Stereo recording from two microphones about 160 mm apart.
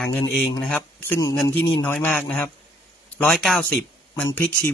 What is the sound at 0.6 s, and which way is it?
Speech, 10° left (ahead or behind).